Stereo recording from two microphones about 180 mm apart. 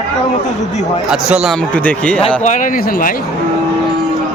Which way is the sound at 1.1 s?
5° right (ahead or behind).